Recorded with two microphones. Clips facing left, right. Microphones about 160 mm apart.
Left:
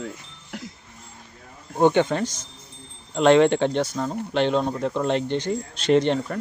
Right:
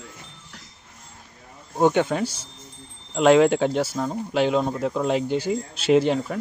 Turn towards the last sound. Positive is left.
turn(degrees=-5)  # may be behind; listen again after turning